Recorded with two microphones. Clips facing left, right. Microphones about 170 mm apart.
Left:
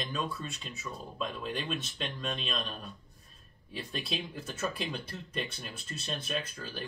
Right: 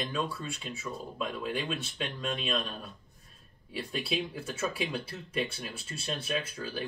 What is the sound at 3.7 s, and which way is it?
Speech, 10° right (ahead or behind).